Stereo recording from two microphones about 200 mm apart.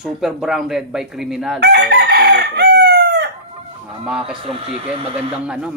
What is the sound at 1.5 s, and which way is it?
Chicken, 55° right (ahead or behind).